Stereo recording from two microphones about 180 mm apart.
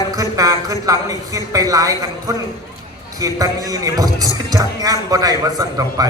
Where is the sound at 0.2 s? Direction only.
20° right (ahead or behind).